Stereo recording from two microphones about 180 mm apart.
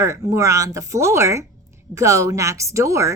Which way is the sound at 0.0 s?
15° right (ahead or behind).